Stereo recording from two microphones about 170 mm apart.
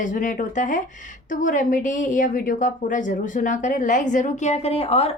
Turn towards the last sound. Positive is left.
turn(degrees=35)  # may be behind; listen again after turning